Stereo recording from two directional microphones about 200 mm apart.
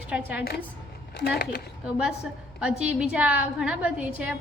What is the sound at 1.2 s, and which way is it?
Speech, 55° left (ahead or behind).